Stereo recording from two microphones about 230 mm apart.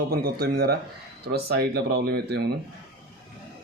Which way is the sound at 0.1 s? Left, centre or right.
Right.